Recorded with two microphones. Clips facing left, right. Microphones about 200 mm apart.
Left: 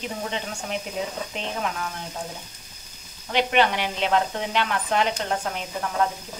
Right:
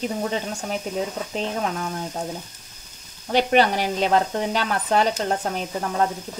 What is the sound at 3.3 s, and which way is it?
Speech, 40° right (ahead or behind).